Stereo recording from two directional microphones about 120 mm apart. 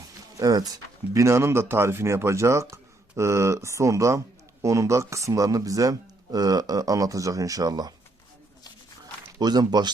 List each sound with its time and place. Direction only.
0.3 s speech: 30° right (ahead or behind)
9.4 s speech: 35° right (ahead or behind)